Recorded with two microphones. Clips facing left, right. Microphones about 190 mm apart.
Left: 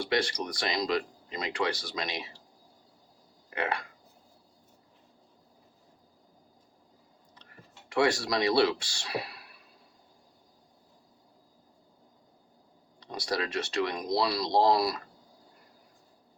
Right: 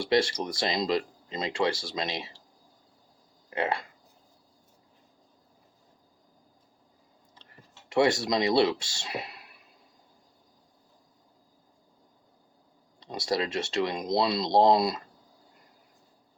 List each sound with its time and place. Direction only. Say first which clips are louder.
0.0 s speech: right 4 dB; 25° right (ahead or behind)
3.5 s speech: right 3 dB; 25° right (ahead or behind)
7.9 s speech: right 3 dB; 25° right (ahead or behind)
13.0 s speech: right 3 dB; 25° right (ahead or behind)